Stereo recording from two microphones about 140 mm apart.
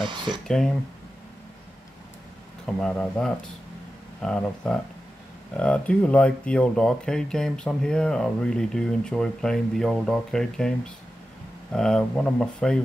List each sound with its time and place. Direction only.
0.0 s speech: 35° right (ahead or behind)
0.5 s speech: 5° left (ahead or behind)
2.6 s speech: 5° left (ahead or behind)
11.7 s speech: 5° left (ahead or behind)